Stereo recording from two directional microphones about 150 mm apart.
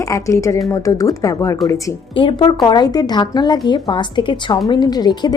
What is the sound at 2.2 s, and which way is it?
Speech, 30° left (ahead or behind).